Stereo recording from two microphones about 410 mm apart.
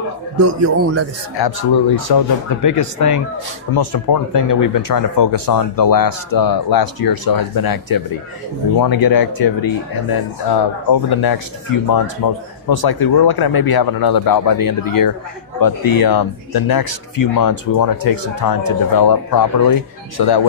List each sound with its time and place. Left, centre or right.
0.6 s a man's voice: right
1.3 s speech: left
3.7 s speech: left